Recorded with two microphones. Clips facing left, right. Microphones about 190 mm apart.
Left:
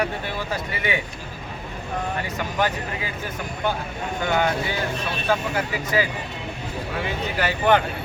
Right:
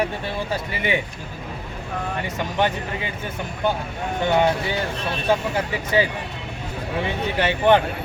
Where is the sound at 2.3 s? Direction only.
25° right (ahead or behind).